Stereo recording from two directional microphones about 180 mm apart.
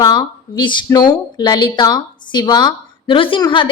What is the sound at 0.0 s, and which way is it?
A woman's voice, 25° left (ahead or behind).